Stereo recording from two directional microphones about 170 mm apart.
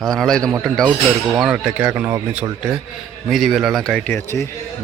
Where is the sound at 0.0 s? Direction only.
Centre (ahead or behind).